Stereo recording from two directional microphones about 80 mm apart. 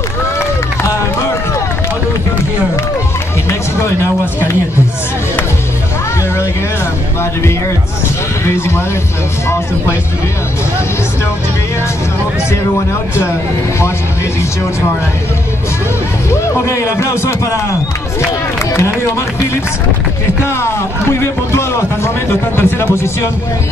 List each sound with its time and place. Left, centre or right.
0.4 s run: left
3.4 s music: left
8.5 s speech: left
16.3 s speech: left
20.4 s speech: left